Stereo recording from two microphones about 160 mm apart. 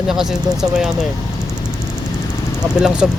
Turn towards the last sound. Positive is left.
turn(degrees=-5)  # may be behind; listen again after turning